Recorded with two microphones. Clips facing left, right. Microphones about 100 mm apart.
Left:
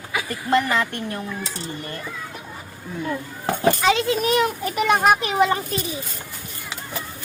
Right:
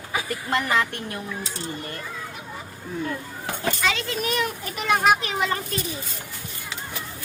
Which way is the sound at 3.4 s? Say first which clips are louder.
Left 7 dB; 40° left (ahead or behind).